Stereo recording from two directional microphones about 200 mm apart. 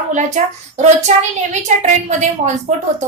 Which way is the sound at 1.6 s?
35° right (ahead or behind).